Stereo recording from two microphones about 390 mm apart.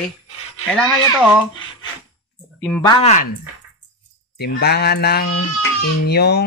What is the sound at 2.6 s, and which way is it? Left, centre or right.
Speech, centre.